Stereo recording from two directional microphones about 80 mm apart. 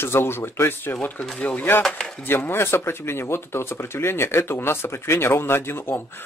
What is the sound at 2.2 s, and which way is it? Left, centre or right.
Speech, left.